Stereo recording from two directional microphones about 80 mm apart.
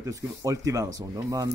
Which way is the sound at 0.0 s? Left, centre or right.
Right.